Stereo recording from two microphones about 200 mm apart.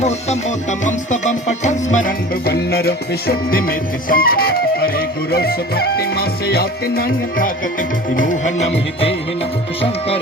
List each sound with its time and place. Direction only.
0.0 s music: 35° left (ahead or behind)